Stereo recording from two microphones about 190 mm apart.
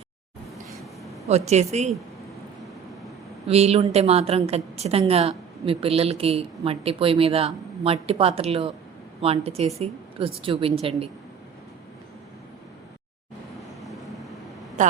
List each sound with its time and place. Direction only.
1.3 s a woman's voice: 35° right (ahead or behind)
3.4 s a woman's voice: 35° right (ahead or behind)
14.8 s a woman's voice: 40° right (ahead or behind)